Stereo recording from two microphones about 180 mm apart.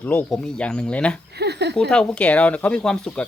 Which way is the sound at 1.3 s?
65° right (ahead or behind).